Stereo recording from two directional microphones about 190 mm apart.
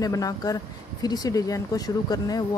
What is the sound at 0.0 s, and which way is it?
Speech, 20° left (ahead or behind).